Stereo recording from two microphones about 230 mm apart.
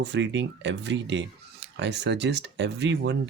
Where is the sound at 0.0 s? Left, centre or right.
Right.